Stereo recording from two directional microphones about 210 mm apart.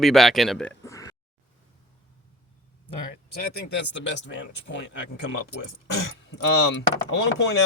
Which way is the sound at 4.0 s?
60° left (ahead or behind).